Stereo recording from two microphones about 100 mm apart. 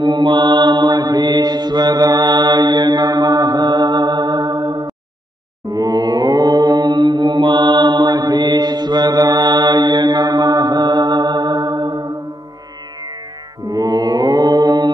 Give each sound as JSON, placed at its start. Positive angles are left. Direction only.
{"t": 0.0, "sound": "mantra", "side_deg": -50}
{"t": 13.7, "sound": "mantra", "side_deg": -40}